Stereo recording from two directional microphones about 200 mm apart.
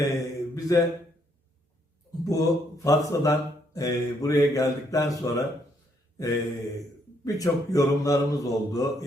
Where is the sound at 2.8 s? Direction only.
15° left (ahead or behind).